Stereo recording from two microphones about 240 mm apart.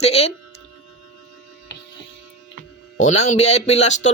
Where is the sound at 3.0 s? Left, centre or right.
Left.